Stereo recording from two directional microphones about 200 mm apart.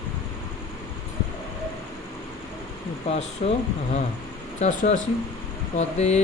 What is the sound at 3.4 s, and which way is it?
Speech, 35° left (ahead or behind).